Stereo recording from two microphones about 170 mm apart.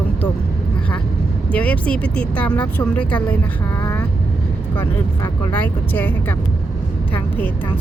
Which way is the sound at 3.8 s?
15° left (ahead or behind).